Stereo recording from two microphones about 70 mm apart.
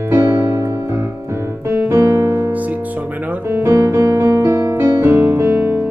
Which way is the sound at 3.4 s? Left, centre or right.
Right.